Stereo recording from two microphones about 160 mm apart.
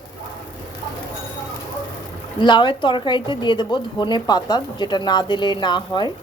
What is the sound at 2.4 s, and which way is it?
A woman's voice, 30° left (ahead or behind).